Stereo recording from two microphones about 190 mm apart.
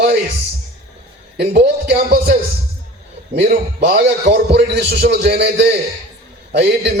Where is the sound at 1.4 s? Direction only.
60° right (ahead or behind).